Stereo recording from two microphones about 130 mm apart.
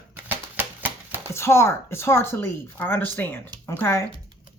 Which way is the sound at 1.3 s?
20° left (ahead or behind).